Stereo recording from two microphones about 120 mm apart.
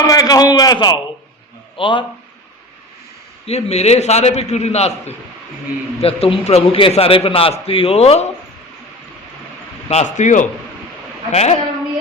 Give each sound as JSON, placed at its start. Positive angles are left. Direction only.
{"t": 0.0, "sound": "a man's voice", "side_deg": 30}
{"t": 3.4, "sound": "a man's voice", "side_deg": 60}
{"t": 9.9, "sound": "a man's voice", "side_deg": 85}
{"t": 11.3, "sound": "a man's voice", "side_deg": 65}